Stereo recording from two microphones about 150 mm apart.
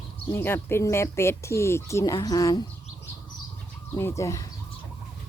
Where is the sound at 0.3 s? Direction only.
15° left (ahead or behind).